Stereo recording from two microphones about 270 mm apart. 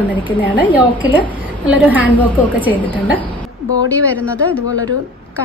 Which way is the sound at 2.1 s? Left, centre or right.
Centre.